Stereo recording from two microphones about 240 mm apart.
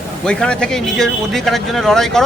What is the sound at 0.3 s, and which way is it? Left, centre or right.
Speech, centre.